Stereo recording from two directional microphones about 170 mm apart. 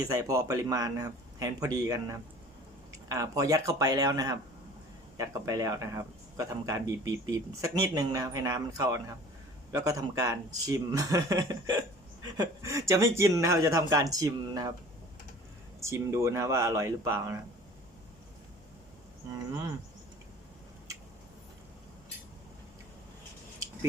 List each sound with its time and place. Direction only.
0.1 s speech: 20° right (ahead or behind)
15.8 s speech: 15° right (ahead or behind)